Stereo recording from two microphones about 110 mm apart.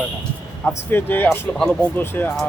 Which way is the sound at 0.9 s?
20° left (ahead or behind).